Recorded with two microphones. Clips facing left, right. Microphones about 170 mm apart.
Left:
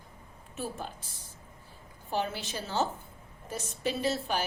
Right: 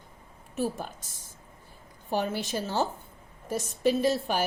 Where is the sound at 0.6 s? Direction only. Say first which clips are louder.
Right 6 dB; 45° right (ahead or behind).